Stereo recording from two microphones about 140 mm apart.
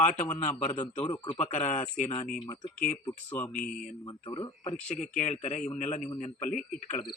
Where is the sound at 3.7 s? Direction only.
80° left.